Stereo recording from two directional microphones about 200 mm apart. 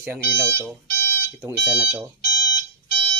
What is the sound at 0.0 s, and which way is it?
Speech, 10° right (ahead or behind).